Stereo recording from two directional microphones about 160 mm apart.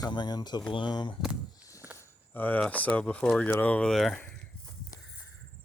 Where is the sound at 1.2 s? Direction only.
5° right (ahead or behind).